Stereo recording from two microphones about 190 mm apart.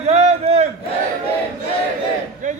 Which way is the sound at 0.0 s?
35° right (ahead or behind).